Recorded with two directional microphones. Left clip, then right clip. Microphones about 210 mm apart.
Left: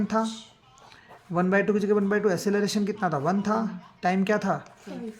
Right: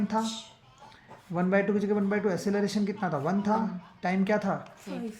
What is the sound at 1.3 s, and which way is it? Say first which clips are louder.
A man's voice: left 3 dB; 40° left (ahead or behind).